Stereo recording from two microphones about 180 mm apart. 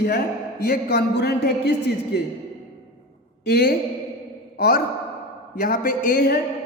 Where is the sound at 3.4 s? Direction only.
65° left (ahead or behind).